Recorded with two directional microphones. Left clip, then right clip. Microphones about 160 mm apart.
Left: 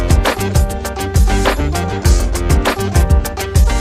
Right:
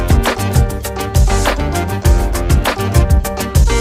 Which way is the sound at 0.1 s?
Centre (ahead or behind).